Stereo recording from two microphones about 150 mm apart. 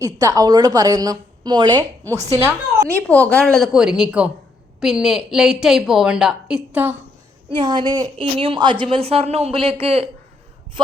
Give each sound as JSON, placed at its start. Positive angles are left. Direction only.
{"t": 0.0, "sound": "a woman's voice", "side_deg": -25}
{"t": 2.9, "sound": "a woman's voice", "side_deg": 10}
{"t": 7.6, "sound": "a woman's voice", "side_deg": -30}